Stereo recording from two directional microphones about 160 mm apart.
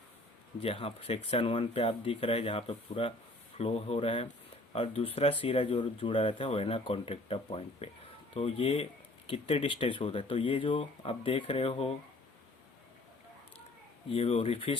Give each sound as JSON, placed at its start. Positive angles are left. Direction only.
{"t": 0.6, "sound": "speech", "side_deg": 35}
{"t": 14.1, "sound": "speech", "side_deg": 35}